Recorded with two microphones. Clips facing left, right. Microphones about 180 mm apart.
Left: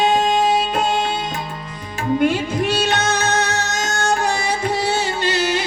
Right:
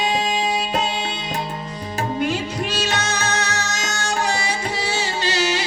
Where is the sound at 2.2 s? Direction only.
60° left (ahead or behind).